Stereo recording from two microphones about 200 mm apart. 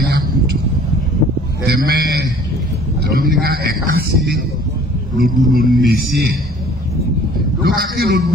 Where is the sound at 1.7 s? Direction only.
55° right (ahead or behind).